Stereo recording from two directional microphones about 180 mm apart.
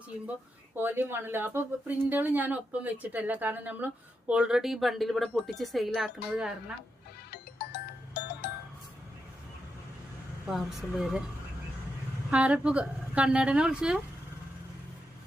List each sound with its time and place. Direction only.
0.8 s a woman's voice: 10° right (ahead or behind)
7.3 s music: 60° left (ahead or behind)
10.5 s a woman's voice: centre (ahead or behind)
12.3 s a woman's voice: 5° right (ahead or behind)